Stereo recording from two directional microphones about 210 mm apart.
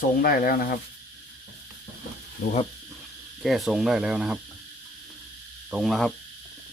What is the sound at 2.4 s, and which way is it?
Speech, 45° left (ahead or behind).